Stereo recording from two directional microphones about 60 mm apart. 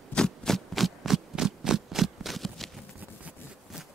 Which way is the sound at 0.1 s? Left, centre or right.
Centre.